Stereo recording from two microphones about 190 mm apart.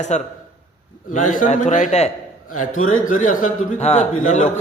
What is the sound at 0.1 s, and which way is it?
A man's voice, 35° left (ahead or behind).